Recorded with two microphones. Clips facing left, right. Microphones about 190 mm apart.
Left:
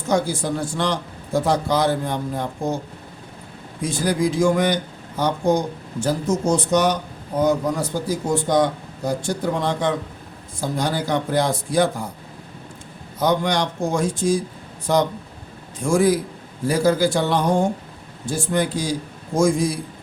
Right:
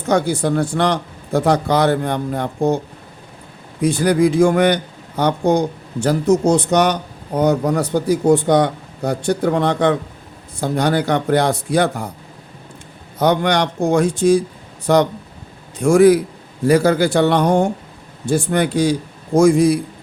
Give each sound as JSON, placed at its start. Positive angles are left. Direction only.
{"t": 0.1, "sound": "speech", "side_deg": -65}
{"t": 3.8, "sound": "speech", "side_deg": -65}
{"t": 13.1, "sound": "speech", "side_deg": -65}